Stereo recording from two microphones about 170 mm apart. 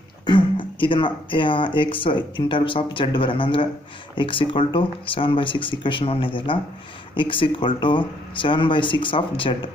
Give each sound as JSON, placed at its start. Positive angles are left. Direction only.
{"t": 0.3, "sound": "speech", "side_deg": 30}